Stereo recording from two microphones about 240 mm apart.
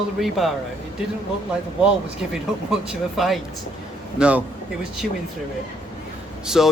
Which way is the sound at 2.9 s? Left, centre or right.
Centre.